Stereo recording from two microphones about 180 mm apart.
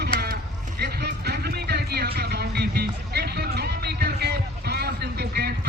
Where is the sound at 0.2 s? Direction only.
55° right (ahead or behind).